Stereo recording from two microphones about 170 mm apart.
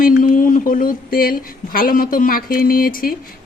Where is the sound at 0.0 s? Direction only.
50° left (ahead or behind).